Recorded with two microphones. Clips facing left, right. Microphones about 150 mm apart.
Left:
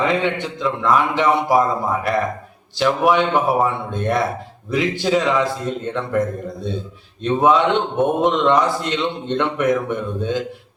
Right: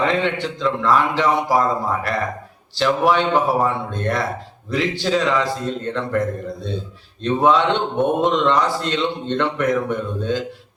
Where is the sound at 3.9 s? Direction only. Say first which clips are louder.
Left 2 dB; 20° left (ahead or behind).